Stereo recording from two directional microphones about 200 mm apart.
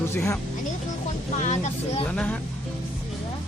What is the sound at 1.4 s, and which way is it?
Speech, 35° left (ahead or behind).